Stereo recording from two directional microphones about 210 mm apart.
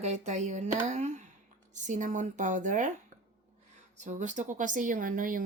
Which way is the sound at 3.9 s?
35° right (ahead or behind).